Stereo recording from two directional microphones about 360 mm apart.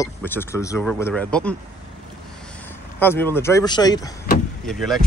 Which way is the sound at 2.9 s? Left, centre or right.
Centre.